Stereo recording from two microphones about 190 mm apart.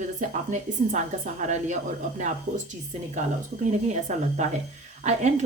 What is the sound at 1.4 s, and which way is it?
Speech, 40° right (ahead or behind).